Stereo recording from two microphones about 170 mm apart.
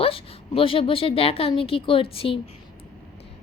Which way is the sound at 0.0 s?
35° left (ahead or behind).